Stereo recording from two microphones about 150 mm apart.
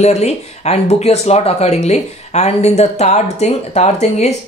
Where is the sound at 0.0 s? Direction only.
45° left (ahead or behind).